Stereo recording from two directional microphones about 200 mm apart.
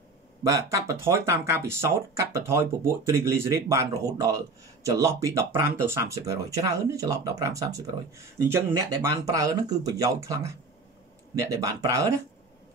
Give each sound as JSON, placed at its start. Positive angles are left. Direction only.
{"t": 0.4, "sound": "speech", "side_deg": -15}